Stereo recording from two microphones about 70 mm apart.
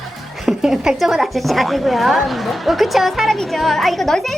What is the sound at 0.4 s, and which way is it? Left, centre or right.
A woman's voice, centre.